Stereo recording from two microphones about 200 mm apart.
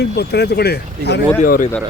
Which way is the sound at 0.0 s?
55° left (ahead or behind).